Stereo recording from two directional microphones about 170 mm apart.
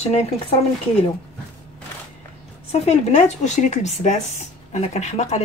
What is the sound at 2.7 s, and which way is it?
Speech, 40° left (ahead or behind).